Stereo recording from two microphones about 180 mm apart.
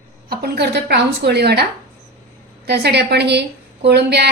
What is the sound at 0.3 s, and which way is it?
A woman's voice, 60° right (ahead or behind).